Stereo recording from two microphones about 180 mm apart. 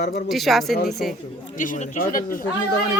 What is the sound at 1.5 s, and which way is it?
Speech, 45° left (ahead or behind).